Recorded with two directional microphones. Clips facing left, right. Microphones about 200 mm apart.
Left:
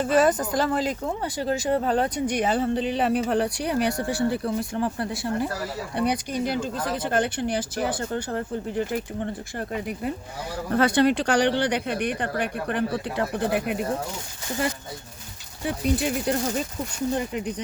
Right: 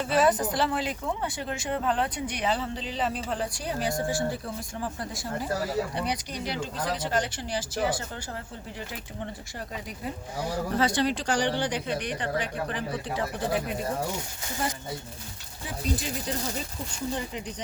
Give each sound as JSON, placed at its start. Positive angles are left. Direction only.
{"t": 0.0, "sound": "speech", "side_deg": 45}
{"t": 6.1, "sound": "speech", "side_deg": 50}
{"t": 10.8, "sound": "speech", "side_deg": 60}
{"t": 15.6, "sound": "speech", "side_deg": 65}